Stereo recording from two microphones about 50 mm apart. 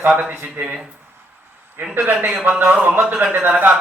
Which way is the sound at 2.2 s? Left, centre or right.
Right.